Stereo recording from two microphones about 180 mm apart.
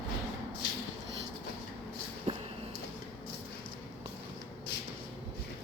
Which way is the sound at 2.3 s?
35° right (ahead or behind).